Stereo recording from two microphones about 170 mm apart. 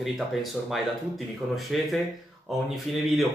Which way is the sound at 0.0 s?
Centre (ahead or behind).